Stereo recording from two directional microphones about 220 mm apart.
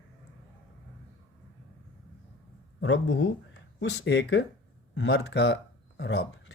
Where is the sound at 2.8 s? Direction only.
60° left (ahead or behind).